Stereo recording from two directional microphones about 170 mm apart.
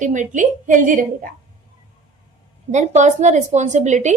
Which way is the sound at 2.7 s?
45° right (ahead or behind).